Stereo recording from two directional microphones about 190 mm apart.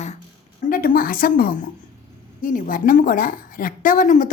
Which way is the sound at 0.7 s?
50° left (ahead or behind).